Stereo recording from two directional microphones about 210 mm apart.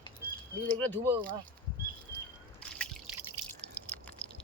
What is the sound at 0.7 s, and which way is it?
Speech, 10° left (ahead or behind).